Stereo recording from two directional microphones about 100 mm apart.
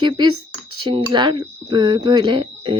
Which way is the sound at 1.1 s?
50° right (ahead or behind).